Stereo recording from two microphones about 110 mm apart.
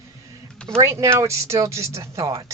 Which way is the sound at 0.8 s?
30° right (ahead or behind).